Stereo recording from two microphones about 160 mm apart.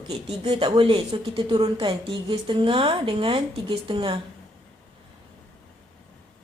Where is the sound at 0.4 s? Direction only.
35° right (ahead or behind).